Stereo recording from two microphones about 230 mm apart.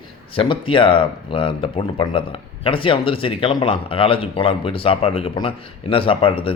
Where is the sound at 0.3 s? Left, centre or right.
Left.